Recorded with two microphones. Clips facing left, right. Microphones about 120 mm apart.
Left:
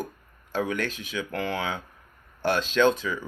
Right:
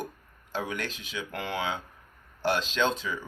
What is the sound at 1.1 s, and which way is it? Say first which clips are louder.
Speech: left 4 dB; 20° right (ahead or behind).